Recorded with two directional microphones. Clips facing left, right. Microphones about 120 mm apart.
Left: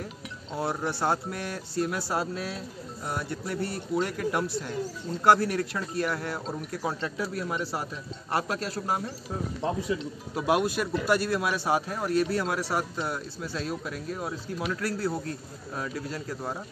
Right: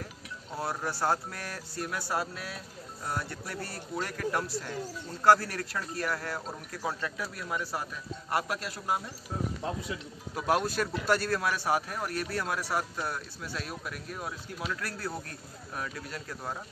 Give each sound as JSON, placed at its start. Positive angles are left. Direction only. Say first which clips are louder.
{"t": 0.5, "sound": "speech", "louder": "left 4 dB", "side_deg": 25}
{"t": 10.3, "sound": "speech", "louder": "left 3 dB", "side_deg": 15}